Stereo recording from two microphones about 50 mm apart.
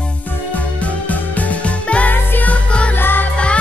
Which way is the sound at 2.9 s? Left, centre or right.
Left.